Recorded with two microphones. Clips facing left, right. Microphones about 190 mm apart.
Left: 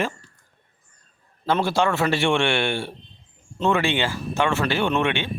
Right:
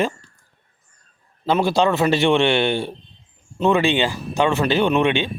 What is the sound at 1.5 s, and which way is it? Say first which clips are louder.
A man's voice: right 3 dB; 15° right (ahead or behind).